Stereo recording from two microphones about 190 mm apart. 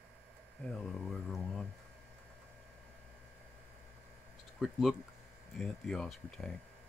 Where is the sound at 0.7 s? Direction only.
Centre (ahead or behind).